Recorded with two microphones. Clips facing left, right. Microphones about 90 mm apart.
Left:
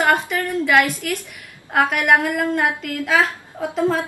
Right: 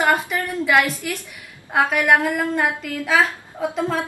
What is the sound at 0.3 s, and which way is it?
A woman's voice, centre (ahead or behind).